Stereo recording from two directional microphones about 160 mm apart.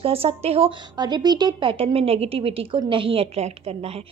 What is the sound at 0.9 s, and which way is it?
A woman's voice, 25° right (ahead or behind).